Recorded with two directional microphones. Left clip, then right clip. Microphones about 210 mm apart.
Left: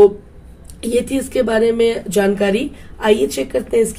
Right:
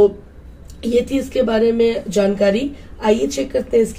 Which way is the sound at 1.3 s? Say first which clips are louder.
Left 1 dB; 35° left (ahead or behind).